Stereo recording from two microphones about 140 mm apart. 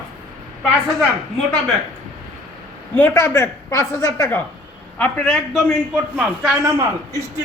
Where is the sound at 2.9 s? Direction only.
10° left (ahead or behind).